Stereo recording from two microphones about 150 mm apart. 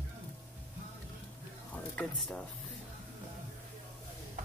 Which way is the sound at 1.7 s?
5° left (ahead or behind).